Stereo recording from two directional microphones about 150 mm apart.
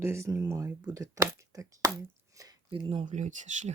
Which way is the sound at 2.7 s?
35° right (ahead or behind).